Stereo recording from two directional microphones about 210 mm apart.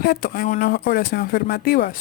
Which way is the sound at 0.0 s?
45° left (ahead or behind).